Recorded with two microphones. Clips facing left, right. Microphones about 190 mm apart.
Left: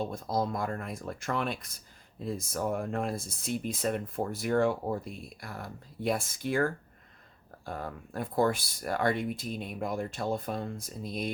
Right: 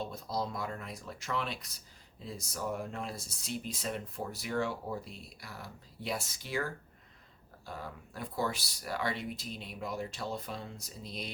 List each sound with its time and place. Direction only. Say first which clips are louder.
0.0 s speech: left 5 dB; 50° left (ahead or behind)